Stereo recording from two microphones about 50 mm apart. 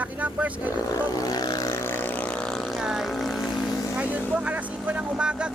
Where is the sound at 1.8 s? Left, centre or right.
Left.